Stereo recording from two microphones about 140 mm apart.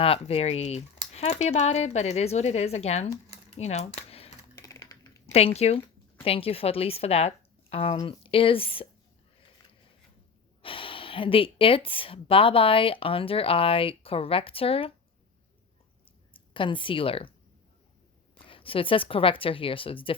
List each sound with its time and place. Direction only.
0.0 s speech: 45° left (ahead or behind)
4.5 s typing: 25° left (ahead or behind)
5.2 s speech: 45° left (ahead or behind)
10.6 s speech: 40° left (ahead or behind)
16.0 s a sound: 40° left (ahead or behind)
18.3 s speech: 40° left (ahead or behind)